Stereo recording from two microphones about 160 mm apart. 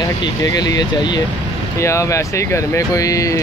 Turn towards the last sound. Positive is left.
turn(degrees=20)  # may be behind; listen again after turning